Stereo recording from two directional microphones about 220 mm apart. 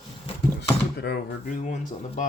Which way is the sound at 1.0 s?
45° left (ahead or behind).